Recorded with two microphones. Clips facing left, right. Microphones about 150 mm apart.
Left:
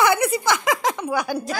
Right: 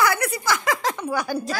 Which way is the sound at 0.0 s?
20° left (ahead or behind).